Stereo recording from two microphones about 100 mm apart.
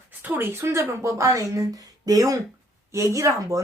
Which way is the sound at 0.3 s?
25° right (ahead or behind).